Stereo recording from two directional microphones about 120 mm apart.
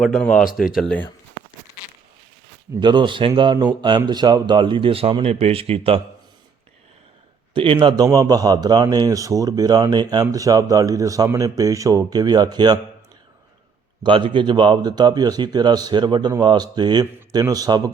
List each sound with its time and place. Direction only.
0.0 s speech: 5° left (ahead or behind)
2.8 s speech: 40° right (ahead or behind)
7.5 s speech: 45° right (ahead or behind)
14.0 s speech: 40° right (ahead or behind)